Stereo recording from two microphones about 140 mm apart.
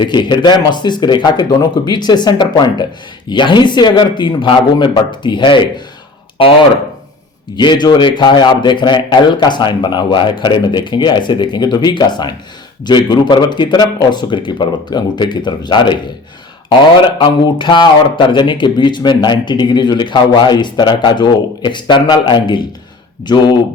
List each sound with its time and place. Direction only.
0.0 s speech: 30° left (ahead or behind)
7.5 s speech: 35° left (ahead or behind)
17.2 s speech: 35° left (ahead or behind)